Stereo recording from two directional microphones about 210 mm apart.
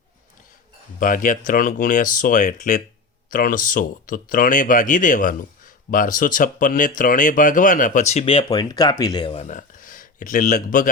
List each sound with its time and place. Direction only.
0.9 s speech: 40° left (ahead or behind)